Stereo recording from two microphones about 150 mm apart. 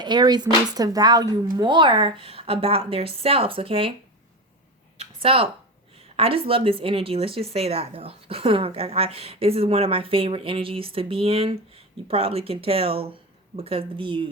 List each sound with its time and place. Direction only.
0.0 s speech: 30° right (ahead or behind)
4.9 s a sound: 40° right (ahead or behind)
6.0 s speech: 40° right (ahead or behind)